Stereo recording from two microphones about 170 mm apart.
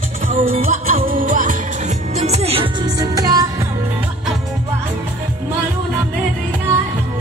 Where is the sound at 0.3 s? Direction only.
45° right (ahead or behind); by 3.6 s 20° right (ahead or behind).